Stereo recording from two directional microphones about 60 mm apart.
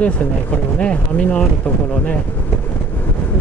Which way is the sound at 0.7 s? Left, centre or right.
Centre.